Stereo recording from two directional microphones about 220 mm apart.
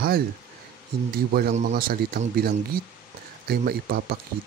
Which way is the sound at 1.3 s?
40° right (ahead or behind).